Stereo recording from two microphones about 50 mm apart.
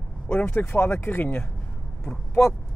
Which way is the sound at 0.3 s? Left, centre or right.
Left.